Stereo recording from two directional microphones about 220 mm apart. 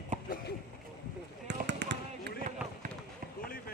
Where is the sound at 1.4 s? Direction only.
50° right (ahead or behind).